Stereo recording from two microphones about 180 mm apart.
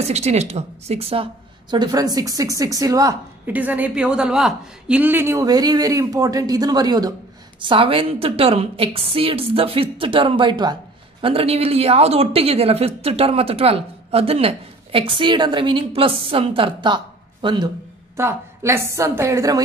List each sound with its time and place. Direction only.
0.1 s a woman's voice: 35° right (ahead or behind)
18.1 s a woman's voice: 15° right (ahead or behind)